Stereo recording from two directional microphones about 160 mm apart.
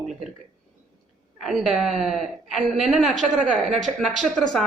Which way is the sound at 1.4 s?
Centre (ahead or behind).